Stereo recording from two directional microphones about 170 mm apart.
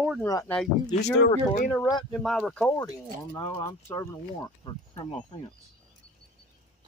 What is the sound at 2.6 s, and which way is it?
Speech, 20° left (ahead or behind).